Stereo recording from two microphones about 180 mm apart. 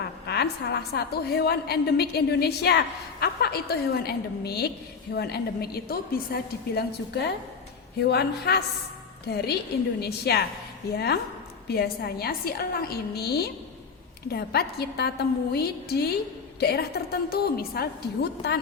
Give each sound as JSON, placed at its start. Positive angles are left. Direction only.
{"t": 0.0, "sound": "a woman's voice", "side_deg": 65}